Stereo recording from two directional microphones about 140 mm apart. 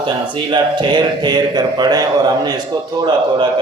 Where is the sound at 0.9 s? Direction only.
30° right (ahead or behind).